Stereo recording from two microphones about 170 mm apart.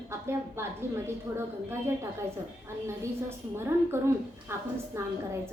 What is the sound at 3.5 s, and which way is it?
A woman's voice, 15° right (ahead or behind).